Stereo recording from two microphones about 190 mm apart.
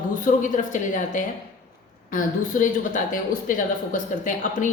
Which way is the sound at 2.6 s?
45° left (ahead or behind).